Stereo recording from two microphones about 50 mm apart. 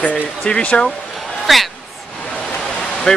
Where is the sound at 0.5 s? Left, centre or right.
Left.